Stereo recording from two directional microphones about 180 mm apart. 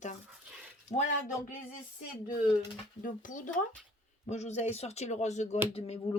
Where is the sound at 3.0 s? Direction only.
45° left (ahead or behind).